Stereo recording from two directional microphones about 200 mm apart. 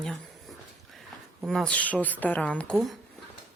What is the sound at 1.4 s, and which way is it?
A woman's voice, 5° left (ahead or behind).